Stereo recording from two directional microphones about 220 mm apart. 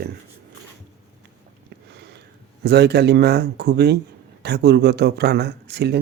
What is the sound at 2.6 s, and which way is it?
Speech, 50° right (ahead or behind).